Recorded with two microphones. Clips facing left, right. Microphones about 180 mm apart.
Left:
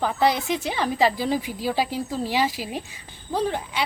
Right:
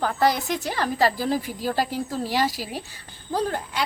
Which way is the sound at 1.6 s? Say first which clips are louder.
Even; 10° left (ahead or behind).